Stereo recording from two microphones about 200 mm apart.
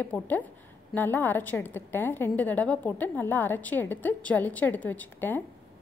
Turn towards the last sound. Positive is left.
turn(degrees=10)  # may be behind; listen again after turning